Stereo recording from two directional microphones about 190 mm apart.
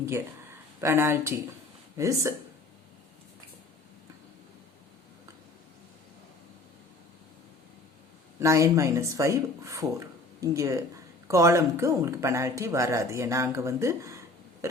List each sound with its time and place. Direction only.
0.8 s speech: 15° right (ahead or behind)
8.4 s speech: 15° right (ahead or behind)